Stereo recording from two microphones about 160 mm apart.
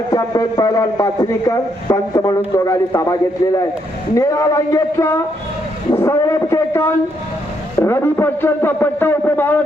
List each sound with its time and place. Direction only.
0.1 s a man's voice: 20° left (ahead or behind)